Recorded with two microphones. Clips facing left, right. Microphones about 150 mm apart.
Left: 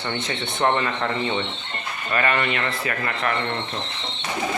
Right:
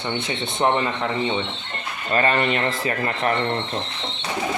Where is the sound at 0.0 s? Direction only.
15° right (ahead or behind).